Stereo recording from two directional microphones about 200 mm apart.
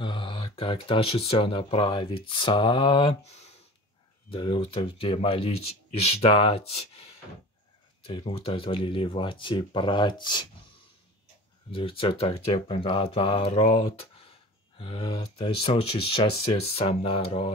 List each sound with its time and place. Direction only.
0.0 s speech: 25° left (ahead or behind)
8.1 s speech: 25° left (ahead or behind)
11.7 s speech: 25° left (ahead or behind)